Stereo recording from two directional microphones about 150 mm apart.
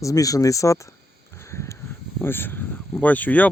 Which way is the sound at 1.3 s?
20° left (ahead or behind).